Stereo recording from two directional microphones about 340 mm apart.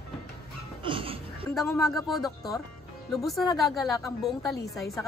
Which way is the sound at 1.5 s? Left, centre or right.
Centre.